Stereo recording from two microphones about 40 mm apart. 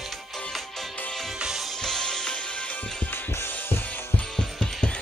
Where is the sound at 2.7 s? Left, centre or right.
Left.